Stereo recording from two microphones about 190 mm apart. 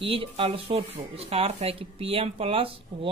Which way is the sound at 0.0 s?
30° right (ahead or behind).